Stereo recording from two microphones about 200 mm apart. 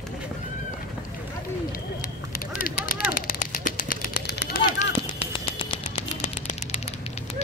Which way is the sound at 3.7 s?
40° left (ahead or behind).